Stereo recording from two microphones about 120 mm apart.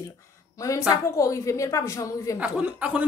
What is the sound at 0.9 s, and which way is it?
A woman's voice, 25° left (ahead or behind).